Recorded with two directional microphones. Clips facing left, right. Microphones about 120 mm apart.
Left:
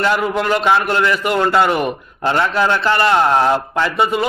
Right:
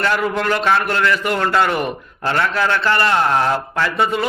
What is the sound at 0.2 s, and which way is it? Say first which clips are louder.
A man's voice: left 2 dB; 10° left (ahead or behind).